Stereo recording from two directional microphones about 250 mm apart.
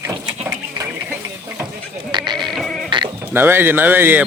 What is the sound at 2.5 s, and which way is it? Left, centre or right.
Music, centre.